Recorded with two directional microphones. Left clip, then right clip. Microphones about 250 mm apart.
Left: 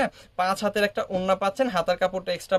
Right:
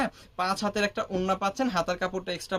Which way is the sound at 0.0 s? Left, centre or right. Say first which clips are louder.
Left 4 dB; left.